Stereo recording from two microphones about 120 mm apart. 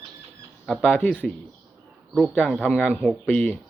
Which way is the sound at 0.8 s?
15° left (ahead or behind).